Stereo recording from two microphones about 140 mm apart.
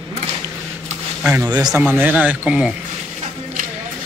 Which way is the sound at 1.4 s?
30° right (ahead or behind).